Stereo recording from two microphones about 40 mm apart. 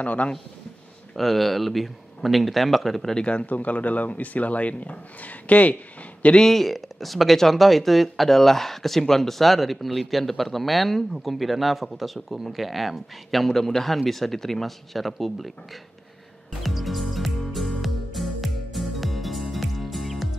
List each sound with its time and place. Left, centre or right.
0.0 s speech: left
1.1 s speech: centre
3.2 s speech: left
3.4 s speech: left
6.4 s speech: centre
16.6 s music: centre